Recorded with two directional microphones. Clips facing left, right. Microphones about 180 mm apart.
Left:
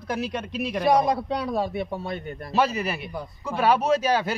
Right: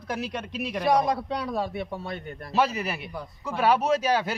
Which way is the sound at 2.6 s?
10° right (ahead or behind).